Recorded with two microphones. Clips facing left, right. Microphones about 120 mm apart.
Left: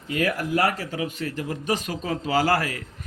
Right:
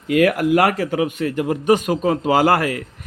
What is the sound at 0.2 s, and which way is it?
Speech, 75° right (ahead or behind).